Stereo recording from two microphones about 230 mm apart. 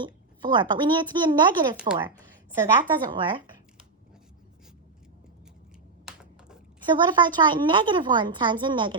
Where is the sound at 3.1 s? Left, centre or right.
Centre.